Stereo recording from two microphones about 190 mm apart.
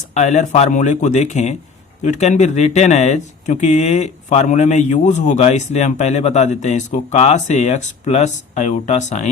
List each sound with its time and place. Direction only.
0.1 s speech: 35° left (ahead or behind)